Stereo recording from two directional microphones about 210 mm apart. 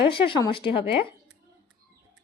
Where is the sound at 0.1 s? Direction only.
20° left (ahead or behind).